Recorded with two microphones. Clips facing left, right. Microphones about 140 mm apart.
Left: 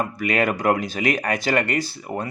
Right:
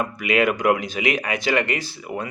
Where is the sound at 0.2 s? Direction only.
40° left (ahead or behind).